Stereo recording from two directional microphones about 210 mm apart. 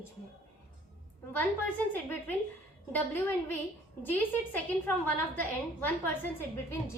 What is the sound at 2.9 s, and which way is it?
Speech, 10° left (ahead or behind).